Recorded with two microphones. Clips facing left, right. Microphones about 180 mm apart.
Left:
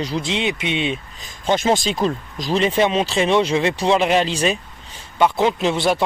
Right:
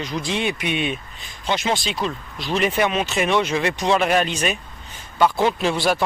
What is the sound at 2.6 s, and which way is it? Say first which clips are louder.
Speech: left 3 dB; 30° left (ahead or behind).